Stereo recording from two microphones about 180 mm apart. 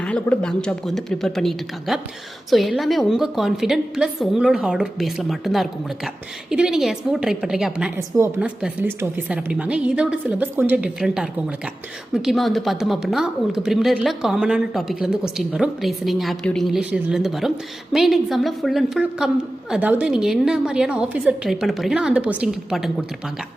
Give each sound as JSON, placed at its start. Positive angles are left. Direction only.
{"t": 0.0, "sound": "speech", "side_deg": 5}